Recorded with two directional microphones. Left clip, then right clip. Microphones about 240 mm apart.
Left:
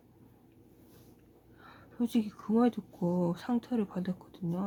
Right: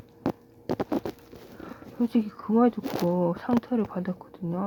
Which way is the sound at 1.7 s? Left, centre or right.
Centre.